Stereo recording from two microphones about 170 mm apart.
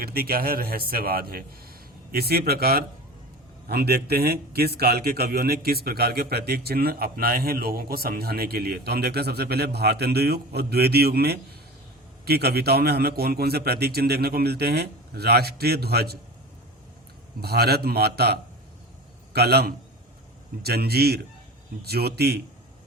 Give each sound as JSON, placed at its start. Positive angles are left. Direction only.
{"t": 0.0, "sound": "a man's voice", "side_deg": -60}
{"t": 17.4, "sound": "a man's voice", "side_deg": -70}